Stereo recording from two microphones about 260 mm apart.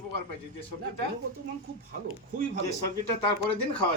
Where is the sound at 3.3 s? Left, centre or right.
Centre.